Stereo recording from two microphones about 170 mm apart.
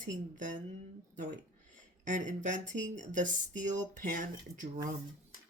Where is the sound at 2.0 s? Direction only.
45° right (ahead or behind).